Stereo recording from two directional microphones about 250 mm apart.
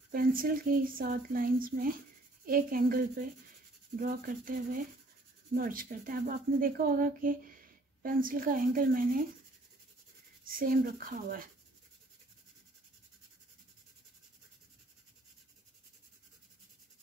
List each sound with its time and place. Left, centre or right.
0.1 s a woman's voice: right
10.4 s a woman's voice: right